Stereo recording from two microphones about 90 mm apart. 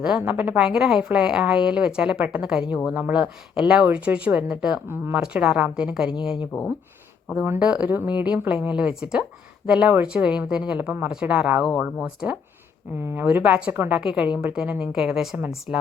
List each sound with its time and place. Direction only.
0.0 s a woman's voice: 10° right (ahead or behind)
7.3 s a woman's voice: 25° right (ahead or behind)
13.0 s speech: 30° right (ahead or behind)
13.2 s a woman's voice: 15° right (ahead or behind)